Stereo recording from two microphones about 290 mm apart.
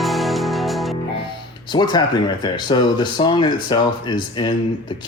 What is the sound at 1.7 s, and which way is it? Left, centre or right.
Speech, centre.